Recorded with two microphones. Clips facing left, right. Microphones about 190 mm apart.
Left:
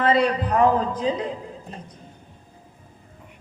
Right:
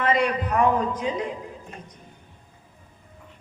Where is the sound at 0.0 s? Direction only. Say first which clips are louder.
Left 3 dB; 30° left (ahead or behind).